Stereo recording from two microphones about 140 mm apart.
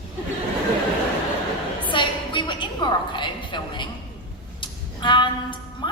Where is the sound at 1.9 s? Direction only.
35° left (ahead or behind).